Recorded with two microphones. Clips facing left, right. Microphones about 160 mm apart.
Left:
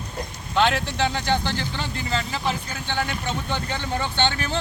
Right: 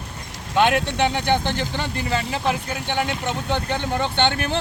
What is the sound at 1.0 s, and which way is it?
Speech, 20° right (ahead or behind).